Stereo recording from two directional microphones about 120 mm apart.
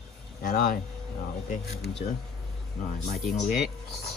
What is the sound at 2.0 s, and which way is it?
Speech, 75° left (ahead or behind).